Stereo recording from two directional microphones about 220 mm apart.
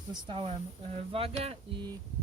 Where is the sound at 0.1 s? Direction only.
25° right (ahead or behind).